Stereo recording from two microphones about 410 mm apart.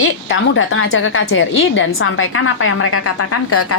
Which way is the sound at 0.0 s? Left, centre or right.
Left.